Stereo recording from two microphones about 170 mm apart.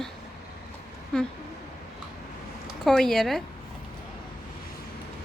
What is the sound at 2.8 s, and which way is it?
Speech, centre (ahead or behind).